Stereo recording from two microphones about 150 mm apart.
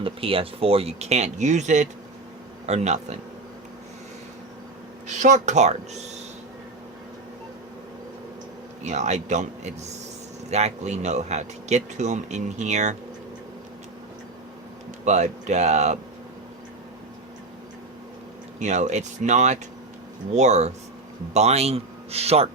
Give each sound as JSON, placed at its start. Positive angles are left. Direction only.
{"t": 0.0, "sound": "speech", "side_deg": -35}
{"t": 5.0, "sound": "speech", "side_deg": -55}
{"t": 8.8, "sound": "speech", "side_deg": -50}
{"t": 15.0, "sound": "speech", "side_deg": -50}
{"t": 18.6, "sound": "speech", "side_deg": -50}